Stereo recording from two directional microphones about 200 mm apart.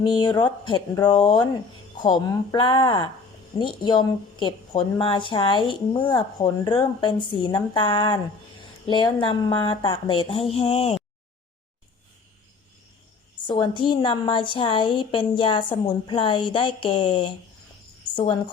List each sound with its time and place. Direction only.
0.0 s a woman's voice: 20° left (ahead or behind)
13.3 s a woman's voice: 25° left (ahead or behind)